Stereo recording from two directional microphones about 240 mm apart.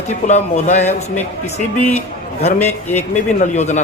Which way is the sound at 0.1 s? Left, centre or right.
Left.